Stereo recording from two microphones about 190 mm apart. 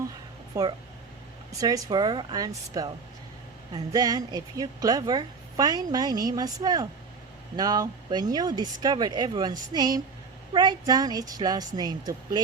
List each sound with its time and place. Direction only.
0.5 s a woman's voice: 15° right (ahead or behind)